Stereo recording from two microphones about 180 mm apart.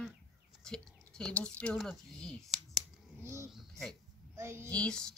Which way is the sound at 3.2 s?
15° right (ahead or behind).